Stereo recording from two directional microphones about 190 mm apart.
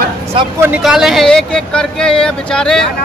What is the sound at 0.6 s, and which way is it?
Speech, 5° right (ahead or behind).